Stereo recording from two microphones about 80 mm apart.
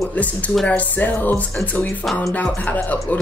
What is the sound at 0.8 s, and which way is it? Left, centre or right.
Speech, left.